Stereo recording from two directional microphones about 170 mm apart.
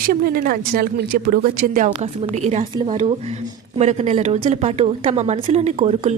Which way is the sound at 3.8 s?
40° right (ahead or behind).